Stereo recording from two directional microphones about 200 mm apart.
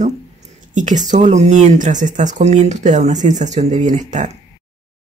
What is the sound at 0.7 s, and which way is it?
Speech, 40° right (ahead or behind).